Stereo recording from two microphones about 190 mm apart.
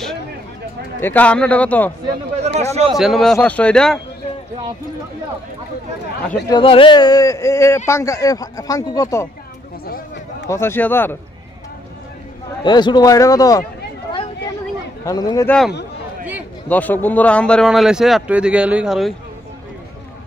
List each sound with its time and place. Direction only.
1.0 s speech: 10° left (ahead or behind)
2.4 s speech: 35° right (ahead or behind)
2.9 s speech: centre (ahead or behind)
6.5 s speech: 30° left (ahead or behind)
9.8 s a sound: 50° left (ahead or behind)
10.5 s speech: 15° left (ahead or behind)
12.6 s a man's voice: 25° left (ahead or behind)
15.0 s speech: 20° left (ahead or behind)
16.6 s speech: 10° left (ahead or behind)